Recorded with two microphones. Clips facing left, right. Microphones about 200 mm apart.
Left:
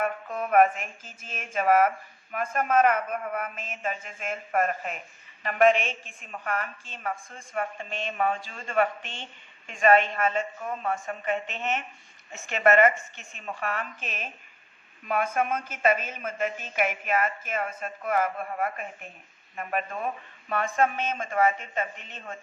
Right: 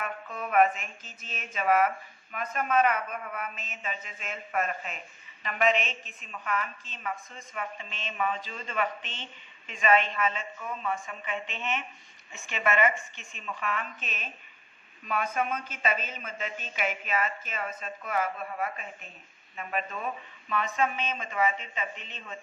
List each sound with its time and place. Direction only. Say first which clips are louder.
0.0 s a woman's voice: left 6 dB; 50° left (ahead or behind)